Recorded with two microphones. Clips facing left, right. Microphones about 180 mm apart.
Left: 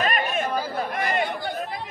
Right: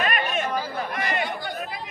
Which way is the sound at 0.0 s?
40° left (ahead or behind).